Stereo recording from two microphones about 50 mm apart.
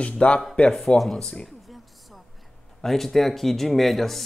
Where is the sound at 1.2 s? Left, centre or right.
Centre.